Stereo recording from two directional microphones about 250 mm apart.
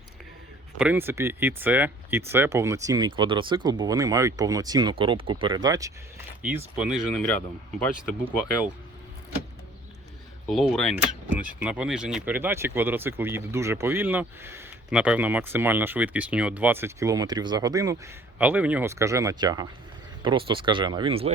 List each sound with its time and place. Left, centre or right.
0.8 s speech: centre
10.4 s speech: centre; by 21.3 s right